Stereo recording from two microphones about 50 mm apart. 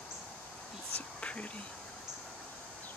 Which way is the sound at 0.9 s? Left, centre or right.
Left.